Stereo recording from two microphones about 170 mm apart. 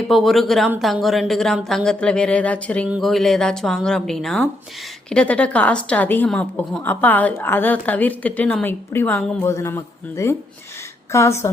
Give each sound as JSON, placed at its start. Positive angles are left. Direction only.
{"t": 0.1, "sound": "a woman's voice", "side_deg": 0}